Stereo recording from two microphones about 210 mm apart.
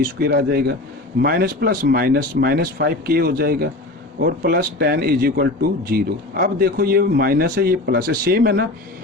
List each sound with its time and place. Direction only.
0.0 s speech: 45° right (ahead or behind)